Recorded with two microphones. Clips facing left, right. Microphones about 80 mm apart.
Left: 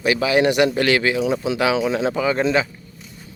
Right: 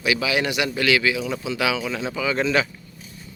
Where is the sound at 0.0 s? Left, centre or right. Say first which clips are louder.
Left 5 dB; left.